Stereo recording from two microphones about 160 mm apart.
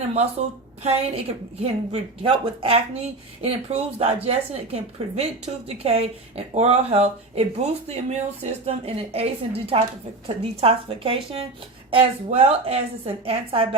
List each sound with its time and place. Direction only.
0.8 s speech: 40° right (ahead or behind)